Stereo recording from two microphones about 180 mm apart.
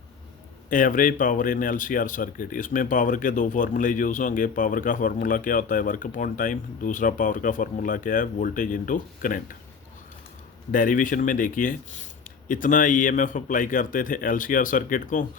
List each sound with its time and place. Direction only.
0.7 s speech: 50° left (ahead or behind)
10.7 s speech: 50° left (ahead or behind)